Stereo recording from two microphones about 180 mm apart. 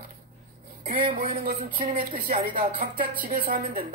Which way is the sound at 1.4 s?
40° right (ahead or behind).